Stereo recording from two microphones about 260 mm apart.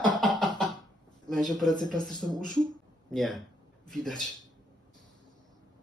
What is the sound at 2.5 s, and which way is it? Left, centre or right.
Speech, centre.